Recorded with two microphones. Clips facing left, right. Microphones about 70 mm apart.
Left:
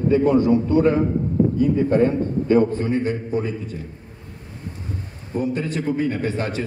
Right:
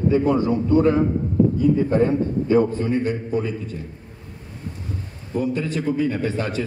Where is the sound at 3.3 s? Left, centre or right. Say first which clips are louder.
Even; centre.